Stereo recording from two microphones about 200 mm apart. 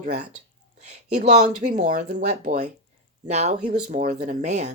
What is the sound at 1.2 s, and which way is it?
Speech, 35° right (ahead or behind).